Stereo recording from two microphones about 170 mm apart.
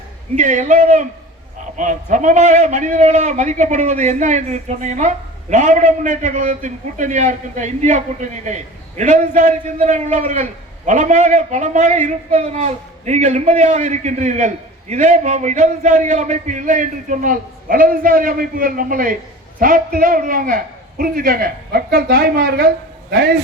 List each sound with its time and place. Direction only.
0.3 s a man's voice: 45° right (ahead or behind); by 23.4 s 70° right (ahead or behind)